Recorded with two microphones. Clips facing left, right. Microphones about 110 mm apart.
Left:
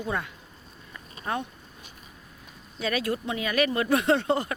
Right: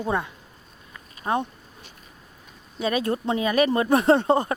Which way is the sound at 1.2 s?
25° right (ahead or behind).